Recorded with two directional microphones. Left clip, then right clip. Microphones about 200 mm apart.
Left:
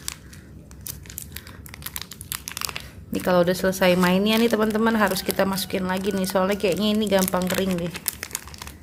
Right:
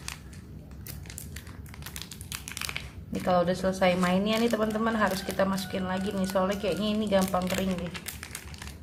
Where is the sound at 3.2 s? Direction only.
60° left (ahead or behind).